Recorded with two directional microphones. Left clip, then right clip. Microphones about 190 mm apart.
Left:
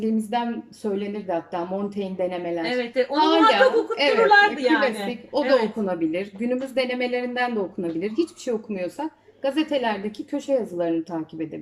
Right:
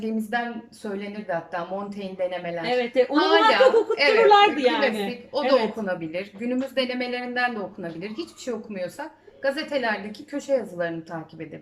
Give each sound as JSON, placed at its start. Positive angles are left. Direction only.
{"t": 0.0, "sound": "a woman's voice", "side_deg": 20}
{"t": 2.6, "sound": "speech", "side_deg": -15}
{"t": 3.2, "sound": "a woman's voice", "side_deg": 15}
{"t": 4.3, "sound": "speech", "side_deg": -10}
{"t": 4.8, "sound": "a woman's voice", "side_deg": 15}